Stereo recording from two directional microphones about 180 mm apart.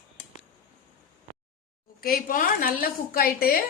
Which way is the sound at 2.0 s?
50° left (ahead or behind).